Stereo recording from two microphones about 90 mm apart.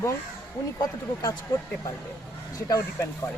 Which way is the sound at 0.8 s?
45° left (ahead or behind).